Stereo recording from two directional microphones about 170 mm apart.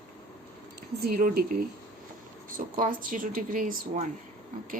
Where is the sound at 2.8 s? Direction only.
55° right (ahead or behind).